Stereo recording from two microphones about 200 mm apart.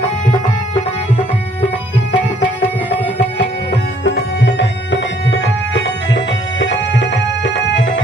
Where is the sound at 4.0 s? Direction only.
60° left (ahead or behind).